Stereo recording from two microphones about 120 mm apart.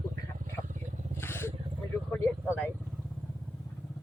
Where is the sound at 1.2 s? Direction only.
20° left (ahead or behind).